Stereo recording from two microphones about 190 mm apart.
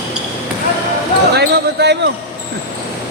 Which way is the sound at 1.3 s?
60° right (ahead or behind).